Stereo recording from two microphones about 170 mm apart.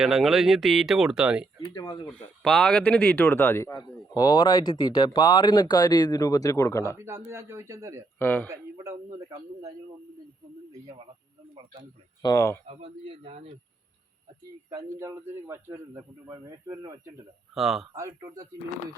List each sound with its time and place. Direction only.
0.0 s speech: centre (ahead or behind)
1.7 s speech: 25° left (ahead or behind)
2.1 s speech: 5° left (ahead or behind)
7.0 s a man's voice: 15° right (ahead or behind)
8.2 s speech: 10° left (ahead or behind)
8.4 s speech: 20° right (ahead or behind)
12.2 s speech: 20° left (ahead or behind)
12.6 s speech: 35° right (ahead or behind)
14.7 s a man's voice: 20° right (ahead or behind)
17.5 s speech: centre (ahead or behind)
17.9 s speech: 20° right (ahead or behind)